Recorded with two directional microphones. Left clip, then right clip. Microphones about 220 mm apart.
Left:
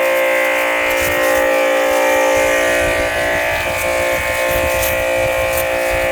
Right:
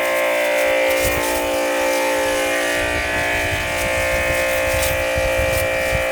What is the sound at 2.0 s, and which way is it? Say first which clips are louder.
Train: left 5 dB; 30° left (ahead or behind).